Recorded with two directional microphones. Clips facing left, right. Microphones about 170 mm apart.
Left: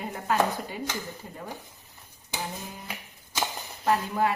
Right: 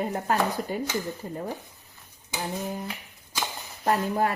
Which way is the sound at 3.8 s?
45° right (ahead or behind).